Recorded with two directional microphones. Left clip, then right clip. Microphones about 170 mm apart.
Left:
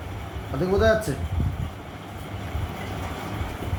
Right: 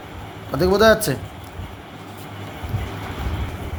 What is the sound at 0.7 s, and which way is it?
Speech, 65° right (ahead or behind).